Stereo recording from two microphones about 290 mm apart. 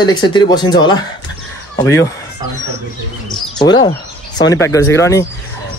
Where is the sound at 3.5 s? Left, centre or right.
Centre.